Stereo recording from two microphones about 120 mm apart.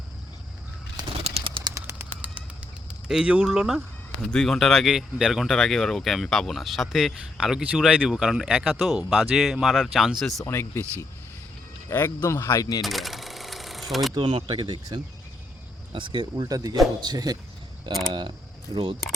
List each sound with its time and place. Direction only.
1.2 s bird: 55° right (ahead or behind)
1.7 s bird: 20° right (ahead or behind)
3.1 s speech: 10° right (ahead or behind)
4.3 s speech: 5° left (ahead or behind)
10.4 s speech: 20° left (ahead or behind)
11.9 s speech: 20° left (ahead or behind)
12.8 s sewing machine: centre (ahead or behind)
14.2 s speech: 45° right (ahead or behind)